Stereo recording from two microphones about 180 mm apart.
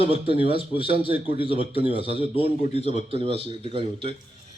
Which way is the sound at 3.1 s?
30° right (ahead or behind).